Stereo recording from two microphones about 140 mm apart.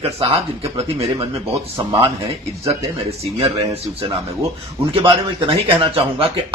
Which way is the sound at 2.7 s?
50° right (ahead or behind).